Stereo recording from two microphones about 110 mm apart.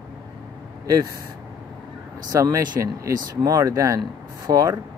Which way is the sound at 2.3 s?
35° right (ahead or behind).